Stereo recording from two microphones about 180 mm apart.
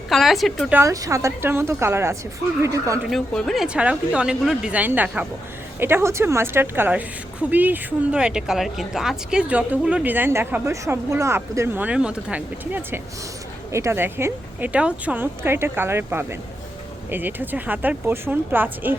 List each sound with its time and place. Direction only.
0.1 s a woman's voice: centre (ahead or behind)
0.7 s speech: 15° right (ahead or behind)
3.0 s a woman's voice: centre (ahead or behind)